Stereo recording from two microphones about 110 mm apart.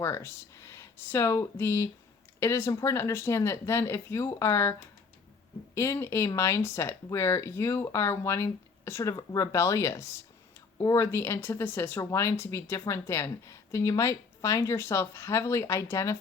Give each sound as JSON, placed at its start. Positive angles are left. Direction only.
{"t": 0.0, "sound": "speech", "side_deg": 25}
{"t": 5.7, "sound": "speech", "side_deg": 25}